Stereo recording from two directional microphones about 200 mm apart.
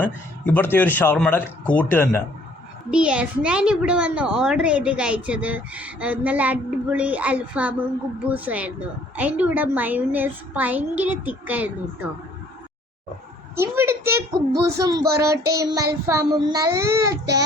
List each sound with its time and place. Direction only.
0.0 s speech: 10° left (ahead or behind)
2.9 s a child's voice: 5° right (ahead or behind)
13.6 s a woman's voice: 10° right (ahead or behind)